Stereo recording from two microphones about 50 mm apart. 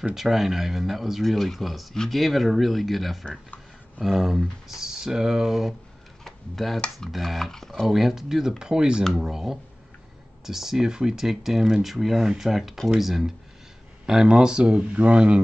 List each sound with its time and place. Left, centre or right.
0.1 s speech: centre
6.2 s tick-tock: centre
7.1 s speech: centre
7.8 s speech: centre; by 15.4 s right